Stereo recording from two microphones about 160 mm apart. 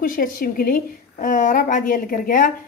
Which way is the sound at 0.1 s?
60° left (ahead or behind).